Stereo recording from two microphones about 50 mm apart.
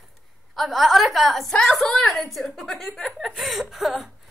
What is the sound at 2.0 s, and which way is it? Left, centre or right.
A woman's voice, centre.